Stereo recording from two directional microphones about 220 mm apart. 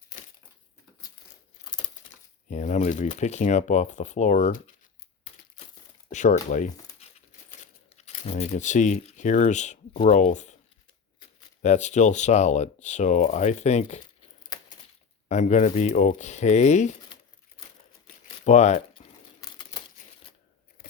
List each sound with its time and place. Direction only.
2.5 s speech: 35° left (ahead or behind)
6.1 s speech: 35° left (ahead or behind)
11.6 s speech: 30° left (ahead or behind)
15.3 s speech: 35° left (ahead or behind)
18.4 s speech: 30° left (ahead or behind)
19.4 s a sound: 15° left (ahead or behind)